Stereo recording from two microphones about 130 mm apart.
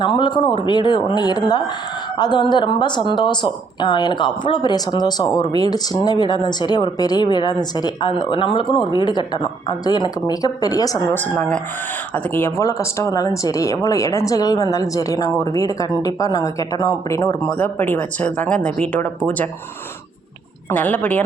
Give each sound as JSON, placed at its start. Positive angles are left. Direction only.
{"t": 0.0, "sound": "speech", "side_deg": 40}
{"t": 11.1, "sound": "speech", "side_deg": 15}
{"t": 20.7, "sound": "speech", "side_deg": 10}